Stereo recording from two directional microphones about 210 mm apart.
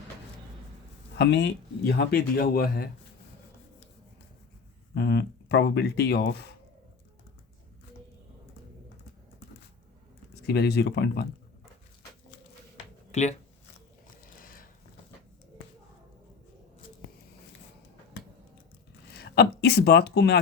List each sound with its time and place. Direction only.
1.2 s speech: 55° left (ahead or behind)
4.9 s speech: 55° left (ahead or behind)
10.4 s speech: 50° left (ahead or behind)
13.1 s speech: 35° left (ahead or behind)
14.4 s a sound: 45° left (ahead or behind)
19.1 s speech: 50° left (ahead or behind)